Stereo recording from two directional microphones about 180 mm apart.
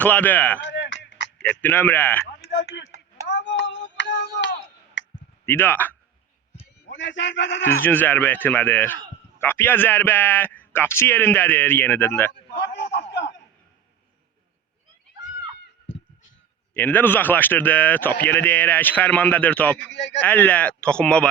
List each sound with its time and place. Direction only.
0.0 s speech: 10° left (ahead or behind)
0.6 s a sound: 80° left
1.4 s speech: 10° left (ahead or behind)
2.5 s speech: 80° left
3.2 s a sound: 80° left
5.5 s speech: 10° left (ahead or behind)
6.9 s a man's voice: 90° left
7.7 s speech: 10° left (ahead or behind)
12.3 s a sound: 70° left (ahead or behind)
16.7 s speech: 10° left (ahead or behind)
19.9 s a man's voice: 85° left
20.2 s speech: 10° left (ahead or behind)